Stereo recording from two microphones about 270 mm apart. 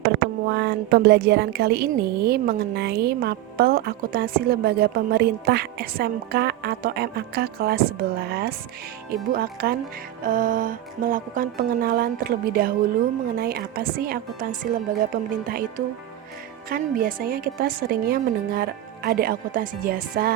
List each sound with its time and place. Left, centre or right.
0.4 s a woman's voice: right
16.6 s a woman's voice: right